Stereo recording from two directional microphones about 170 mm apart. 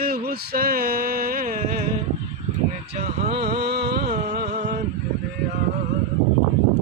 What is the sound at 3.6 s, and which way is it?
Music, 75° right (ahead or behind).